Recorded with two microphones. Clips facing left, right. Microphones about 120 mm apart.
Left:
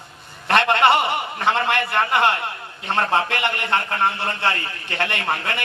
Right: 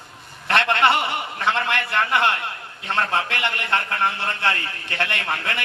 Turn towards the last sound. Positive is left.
turn(degrees=25)  # may be behind; listen again after turning